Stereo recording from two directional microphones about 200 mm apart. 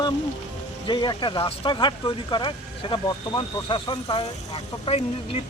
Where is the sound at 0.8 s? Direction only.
25° left (ahead or behind).